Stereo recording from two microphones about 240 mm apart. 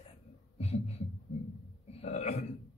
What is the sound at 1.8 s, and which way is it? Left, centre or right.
Burping, left.